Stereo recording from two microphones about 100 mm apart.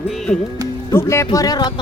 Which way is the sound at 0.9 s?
25° left (ahead or behind).